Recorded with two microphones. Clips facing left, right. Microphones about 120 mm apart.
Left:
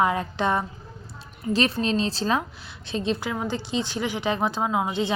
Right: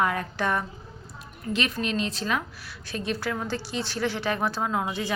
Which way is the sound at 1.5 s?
35° left (ahead or behind).